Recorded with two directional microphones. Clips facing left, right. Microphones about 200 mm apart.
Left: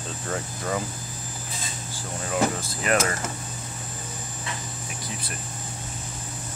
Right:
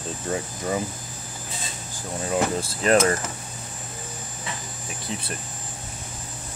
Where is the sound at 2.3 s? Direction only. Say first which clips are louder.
Right 1 dB; 30° right (ahead or behind).